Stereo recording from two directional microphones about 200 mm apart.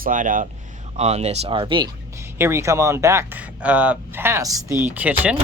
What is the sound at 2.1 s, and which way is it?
Speech, 10° right (ahead or behind).